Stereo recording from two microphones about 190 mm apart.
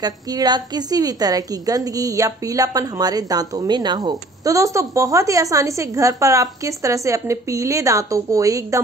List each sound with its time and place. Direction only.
0.0 s a woman's voice: 20° right (ahead or behind)